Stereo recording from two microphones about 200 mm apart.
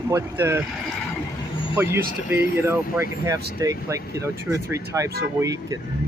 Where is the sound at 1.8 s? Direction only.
10° right (ahead or behind).